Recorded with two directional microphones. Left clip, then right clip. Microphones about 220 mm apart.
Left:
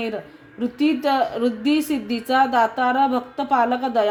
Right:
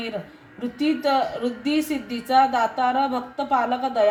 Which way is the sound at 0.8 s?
50° left (ahead or behind).